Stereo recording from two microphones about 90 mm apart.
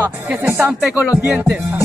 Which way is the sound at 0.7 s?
10° right (ahead or behind).